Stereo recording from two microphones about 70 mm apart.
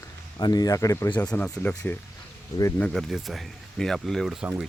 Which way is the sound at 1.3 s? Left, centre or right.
Left.